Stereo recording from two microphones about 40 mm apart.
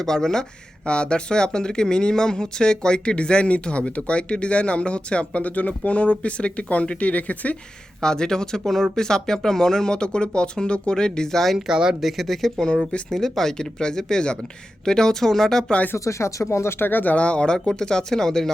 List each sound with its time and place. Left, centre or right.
0.0 s speech: centre
0.9 s speech: left
8.0 s speech: centre
11.5 s speech: centre
11.9 s speech: centre
16.1 s speech: left
16.9 s speech: left
17.2 s speech: left; by 18.5 s centre